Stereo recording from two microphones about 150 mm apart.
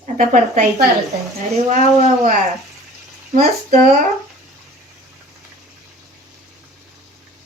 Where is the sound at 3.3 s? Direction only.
50° right (ahead or behind).